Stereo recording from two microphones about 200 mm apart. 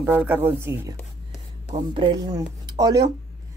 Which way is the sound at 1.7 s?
25° right (ahead or behind).